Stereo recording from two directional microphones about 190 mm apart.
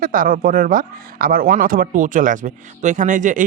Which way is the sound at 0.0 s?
45° right (ahead or behind).